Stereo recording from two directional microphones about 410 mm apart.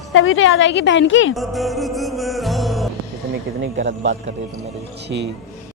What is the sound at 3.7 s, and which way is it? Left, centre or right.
Speech, right.